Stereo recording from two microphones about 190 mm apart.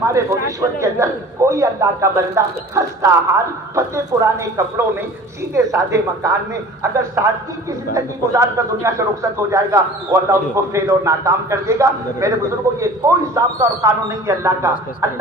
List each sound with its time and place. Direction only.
0.0 s a man's voice: 15° right (ahead or behind)